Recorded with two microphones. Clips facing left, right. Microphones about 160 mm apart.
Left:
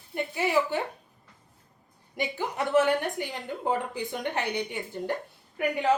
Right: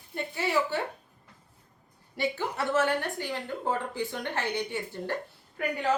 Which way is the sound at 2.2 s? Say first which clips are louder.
Even; 15° left (ahead or behind).